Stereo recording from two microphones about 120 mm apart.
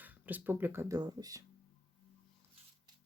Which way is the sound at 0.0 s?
15° right (ahead or behind).